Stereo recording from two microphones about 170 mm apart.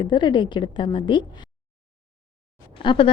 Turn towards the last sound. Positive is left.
turn(degrees=30)  # may be behind; listen again after turning